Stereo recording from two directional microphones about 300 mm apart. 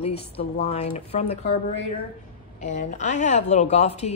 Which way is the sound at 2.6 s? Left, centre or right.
Left.